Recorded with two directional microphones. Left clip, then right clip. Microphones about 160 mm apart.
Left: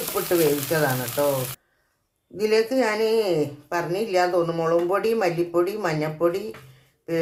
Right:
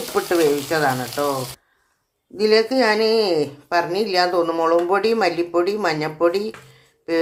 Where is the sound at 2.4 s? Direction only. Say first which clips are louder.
Right 4 dB; 25° right (ahead or behind).